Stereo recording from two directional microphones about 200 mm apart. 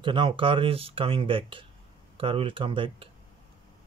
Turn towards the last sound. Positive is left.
turn(degrees=-25)  # may be behind; listen again after turning